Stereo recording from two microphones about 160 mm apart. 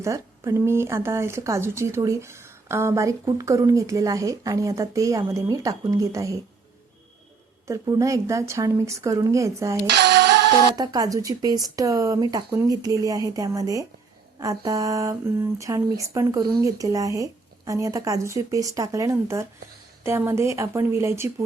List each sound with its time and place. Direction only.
0.0 s speech: 20° right (ahead or behind)
7.7 s speech: 20° right (ahead or behind)
9.8 s music: 90° right
10.8 s a woman's voice: 25° right (ahead or behind)